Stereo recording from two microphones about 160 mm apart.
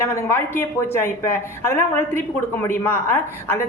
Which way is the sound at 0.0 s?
15° left (ahead or behind).